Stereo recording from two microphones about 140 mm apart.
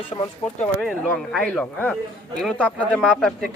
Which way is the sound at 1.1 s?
5° left (ahead or behind).